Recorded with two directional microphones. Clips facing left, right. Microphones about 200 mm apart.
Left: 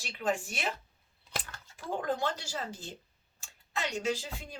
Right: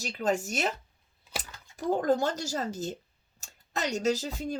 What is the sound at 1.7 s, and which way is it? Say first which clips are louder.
Speech: right 8 dB; 40° right (ahead or behind).